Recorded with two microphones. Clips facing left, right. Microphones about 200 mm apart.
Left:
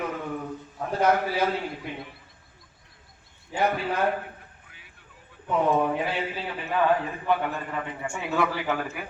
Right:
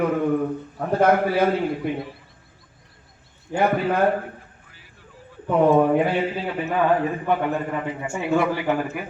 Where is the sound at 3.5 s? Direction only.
50° right (ahead or behind).